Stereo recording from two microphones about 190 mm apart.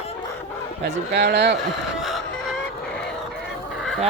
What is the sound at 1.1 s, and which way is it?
Speech, 60° right (ahead or behind).